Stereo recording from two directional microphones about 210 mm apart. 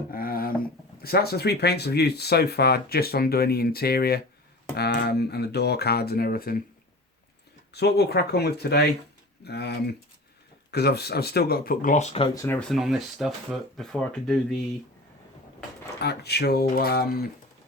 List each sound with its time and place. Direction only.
0.1 s speech: 45° left (ahead or behind)
7.7 s speech: 50° left (ahead or behind); by 14.3 s centre (ahead or behind)
16.0 s speech: 50° left (ahead or behind)